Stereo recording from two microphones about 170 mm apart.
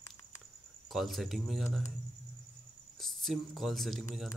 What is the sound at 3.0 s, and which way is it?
A man's voice, centre (ahead or behind).